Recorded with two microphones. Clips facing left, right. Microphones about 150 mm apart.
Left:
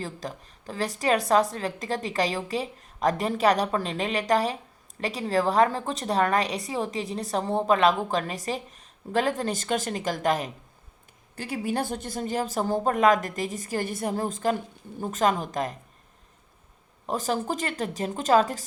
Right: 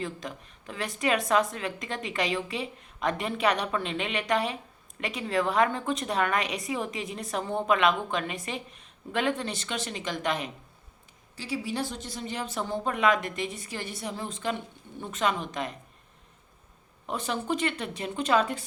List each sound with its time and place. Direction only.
0.0 s a woman's voice: 35° left (ahead or behind)
17.1 s a woman's voice: 40° left (ahead or behind)